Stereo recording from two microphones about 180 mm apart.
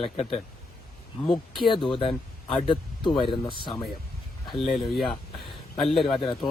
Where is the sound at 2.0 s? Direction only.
25° left (ahead or behind).